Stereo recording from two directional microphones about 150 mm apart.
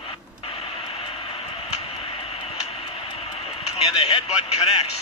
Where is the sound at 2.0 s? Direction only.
40° left (ahead or behind).